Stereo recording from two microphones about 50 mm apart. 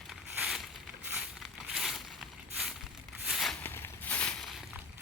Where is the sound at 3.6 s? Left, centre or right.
Left.